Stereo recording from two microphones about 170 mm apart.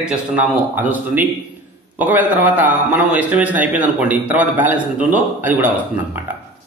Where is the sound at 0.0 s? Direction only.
5° right (ahead or behind).